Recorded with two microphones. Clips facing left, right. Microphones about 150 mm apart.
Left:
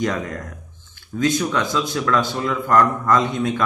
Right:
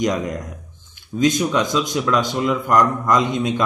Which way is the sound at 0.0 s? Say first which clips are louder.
Right 3 dB; 15° right (ahead or behind).